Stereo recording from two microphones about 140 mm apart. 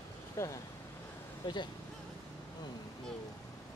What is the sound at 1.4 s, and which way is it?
Speech, 30° left (ahead or behind).